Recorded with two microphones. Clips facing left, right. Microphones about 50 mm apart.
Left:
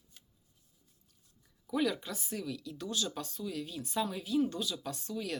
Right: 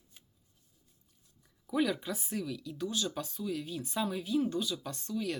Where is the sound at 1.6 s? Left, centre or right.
Centre.